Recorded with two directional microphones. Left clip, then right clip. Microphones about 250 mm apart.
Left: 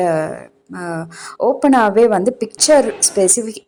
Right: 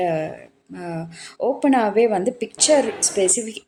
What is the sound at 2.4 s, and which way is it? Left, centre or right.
A woman's voice, centre.